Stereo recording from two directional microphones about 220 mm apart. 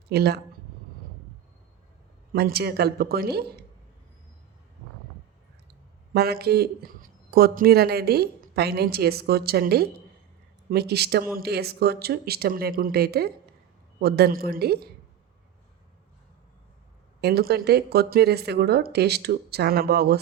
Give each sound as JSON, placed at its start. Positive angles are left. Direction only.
{"t": 0.1, "sound": "speech", "side_deg": -45}
{"t": 2.3, "sound": "speech", "side_deg": -45}
{"t": 6.1, "sound": "speech", "side_deg": -45}
{"t": 17.2, "sound": "speech", "side_deg": -45}